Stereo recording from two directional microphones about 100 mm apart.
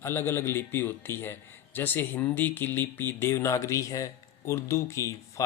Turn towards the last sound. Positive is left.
turn(degrees=30)  # may be behind; listen again after turning